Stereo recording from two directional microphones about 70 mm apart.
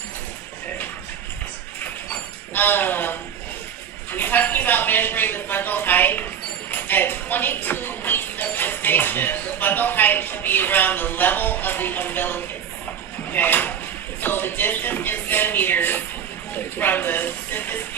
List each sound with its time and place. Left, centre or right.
2.5 s speech: left